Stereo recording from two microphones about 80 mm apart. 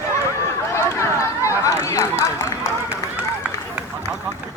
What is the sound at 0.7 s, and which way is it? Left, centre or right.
Run, left.